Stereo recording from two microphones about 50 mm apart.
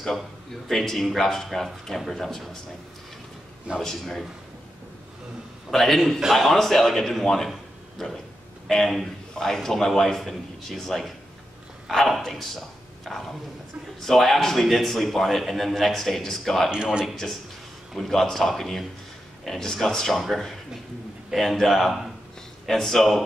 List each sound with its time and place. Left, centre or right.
0.7 s a man's voice: centre
3.8 s a man's voice: centre
5.7 s a man's voice: centre
8.6 s a man's voice: centre
16.7 s speech: centre
17.1 s a man's voice: centre